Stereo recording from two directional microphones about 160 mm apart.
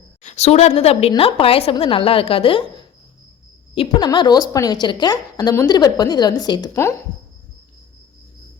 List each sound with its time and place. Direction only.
0.2 s a woman's voice: 45° left (ahead or behind)
3.9 s a woman's voice: 25° left (ahead or behind)